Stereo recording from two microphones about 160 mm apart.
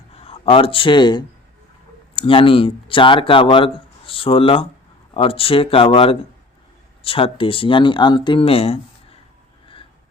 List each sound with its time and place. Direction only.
0.1 s speech: 40° left (ahead or behind)